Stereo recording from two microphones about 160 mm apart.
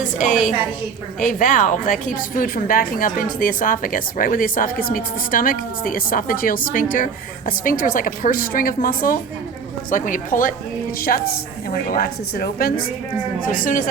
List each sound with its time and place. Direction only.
0.0 s a woman's voice: 50° left (ahead or behind)
11.7 s a woman's voice: 70° left (ahead or behind)
13.5 s a woman's voice: 55° left (ahead or behind)